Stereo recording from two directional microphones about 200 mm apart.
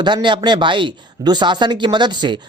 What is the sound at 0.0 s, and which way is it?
Speech, 25° right (ahead or behind).